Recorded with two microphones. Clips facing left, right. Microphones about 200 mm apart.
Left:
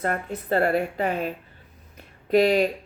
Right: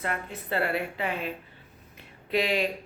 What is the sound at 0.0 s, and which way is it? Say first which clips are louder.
Speech: left 6 dB; 45° left (ahead or behind).